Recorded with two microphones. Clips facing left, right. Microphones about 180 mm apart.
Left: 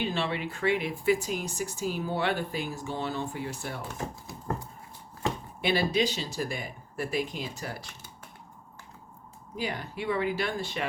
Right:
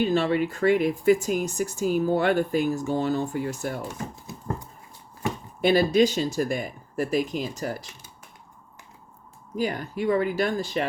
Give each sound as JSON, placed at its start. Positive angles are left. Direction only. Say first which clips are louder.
{"t": 0.0, "sound": "speech", "louder": "right 8 dB", "side_deg": -45}
{"t": 5.6, "sound": "speech", "louder": "right 7 dB", "side_deg": -45}
{"t": 9.6, "sound": "speech", "louder": "right 7 dB", "side_deg": -45}